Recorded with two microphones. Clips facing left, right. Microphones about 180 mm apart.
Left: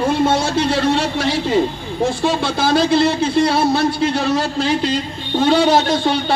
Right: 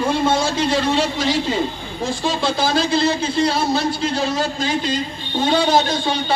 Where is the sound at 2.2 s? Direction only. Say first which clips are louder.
Left 2 dB; 60° left (ahead or behind).